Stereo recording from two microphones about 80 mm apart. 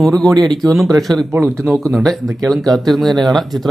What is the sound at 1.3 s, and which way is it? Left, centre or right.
Speech, right.